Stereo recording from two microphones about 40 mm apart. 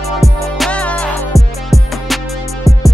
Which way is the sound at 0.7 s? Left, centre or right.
Left.